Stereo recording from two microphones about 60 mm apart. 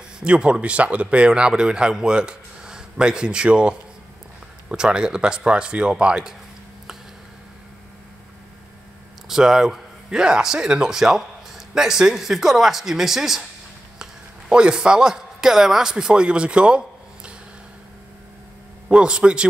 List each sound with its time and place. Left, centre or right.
0.2 s speech: centre
9.3 s speech: centre
14.5 s a man's voice: centre
18.9 s speech: centre